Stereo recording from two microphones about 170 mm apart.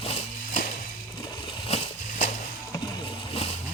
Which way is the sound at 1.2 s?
25° left (ahead or behind).